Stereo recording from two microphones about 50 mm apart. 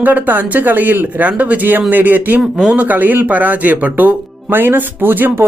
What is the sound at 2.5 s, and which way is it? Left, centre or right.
Speech, centre.